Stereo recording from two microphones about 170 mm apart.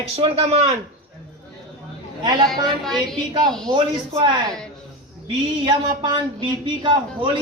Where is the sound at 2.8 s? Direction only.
Centre (ahead or behind).